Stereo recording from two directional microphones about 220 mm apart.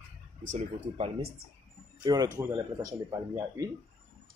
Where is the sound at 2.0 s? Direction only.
20° right (ahead or behind).